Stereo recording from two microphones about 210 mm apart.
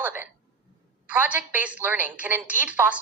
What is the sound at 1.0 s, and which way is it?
A woman's voice, 10° right (ahead or behind).